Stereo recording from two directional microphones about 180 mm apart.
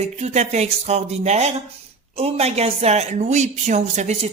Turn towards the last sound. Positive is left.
turn(degrees=-40)  # may be behind; listen again after turning